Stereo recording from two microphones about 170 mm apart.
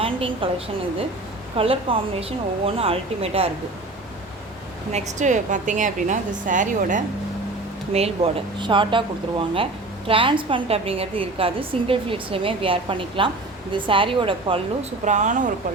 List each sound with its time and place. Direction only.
0.0 s a woman's voice: 30° right (ahead or behind)
1.5 s a woman's voice: 35° right (ahead or behind)
4.9 s a woman's voice: 40° right (ahead or behind)
7.9 s a woman's voice: 35° right (ahead or behind)
15.0 s a woman's voice: 45° right (ahead or behind)